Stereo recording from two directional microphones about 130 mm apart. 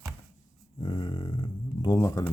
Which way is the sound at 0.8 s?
35° left (ahead or behind).